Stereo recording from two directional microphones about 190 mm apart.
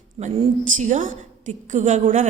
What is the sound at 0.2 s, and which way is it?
Speech, 25° right (ahead or behind).